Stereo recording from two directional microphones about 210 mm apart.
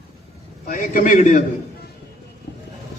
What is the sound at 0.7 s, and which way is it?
Speech, 40° left (ahead or behind).